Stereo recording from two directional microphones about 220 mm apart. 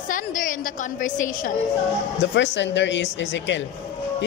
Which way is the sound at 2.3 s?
55° left (ahead or behind).